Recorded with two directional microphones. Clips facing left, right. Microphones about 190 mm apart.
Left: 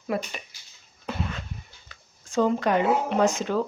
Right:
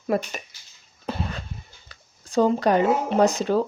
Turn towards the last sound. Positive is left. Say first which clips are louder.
# right 3 dB
turn(degrees=-35)  # may be behind; listen again after turning